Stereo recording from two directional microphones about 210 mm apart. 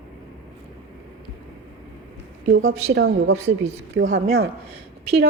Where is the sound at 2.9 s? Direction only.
50° right (ahead or behind).